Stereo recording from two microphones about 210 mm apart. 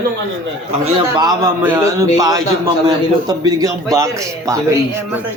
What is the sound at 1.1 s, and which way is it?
A man's voice, 15° right (ahead or behind).